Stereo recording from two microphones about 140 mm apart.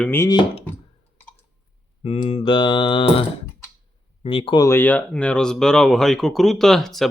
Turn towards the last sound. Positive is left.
turn(degrees=0)  # may be behind; listen again after turning